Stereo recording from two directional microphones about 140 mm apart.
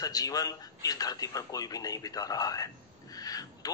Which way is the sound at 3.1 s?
25° left (ahead or behind).